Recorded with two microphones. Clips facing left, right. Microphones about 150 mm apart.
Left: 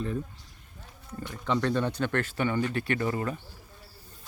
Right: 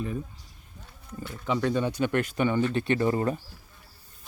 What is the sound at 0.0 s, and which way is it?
Speech, 10° right (ahead or behind).